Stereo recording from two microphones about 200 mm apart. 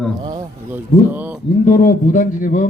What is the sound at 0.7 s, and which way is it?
Speech, 10° right (ahead or behind).